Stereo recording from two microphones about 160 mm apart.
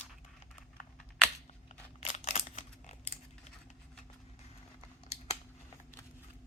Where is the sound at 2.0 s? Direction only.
40° left (ahead or behind).